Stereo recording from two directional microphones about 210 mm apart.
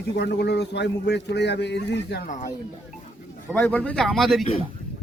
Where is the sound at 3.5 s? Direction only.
10° left (ahead or behind).